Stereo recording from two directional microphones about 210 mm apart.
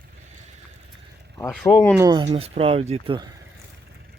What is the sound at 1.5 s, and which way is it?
Speech, centre (ahead or behind).